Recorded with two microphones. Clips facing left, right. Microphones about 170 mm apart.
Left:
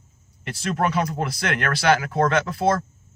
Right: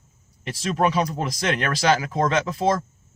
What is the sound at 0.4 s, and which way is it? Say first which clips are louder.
Speech: right 2 dB; 15° right (ahead or behind).